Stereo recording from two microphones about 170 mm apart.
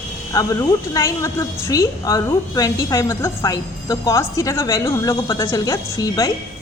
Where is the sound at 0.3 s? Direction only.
20° left (ahead or behind).